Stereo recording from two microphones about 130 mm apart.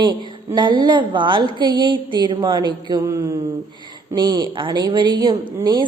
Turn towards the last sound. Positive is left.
turn(degrees=-35)  # may be behind; listen again after turning